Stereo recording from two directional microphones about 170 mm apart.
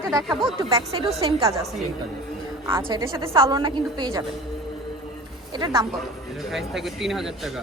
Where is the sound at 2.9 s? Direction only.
20° right (ahead or behind).